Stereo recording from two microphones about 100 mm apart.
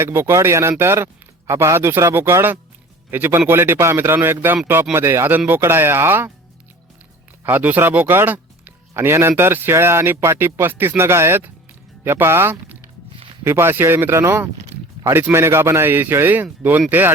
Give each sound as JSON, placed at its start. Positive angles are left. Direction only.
{"t": 0.0, "sound": "a man's voice", "side_deg": -25}
{"t": 7.4, "sound": "a man's voice", "side_deg": -15}